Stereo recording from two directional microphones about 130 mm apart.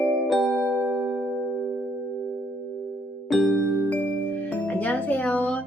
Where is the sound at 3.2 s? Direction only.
Centre (ahead or behind).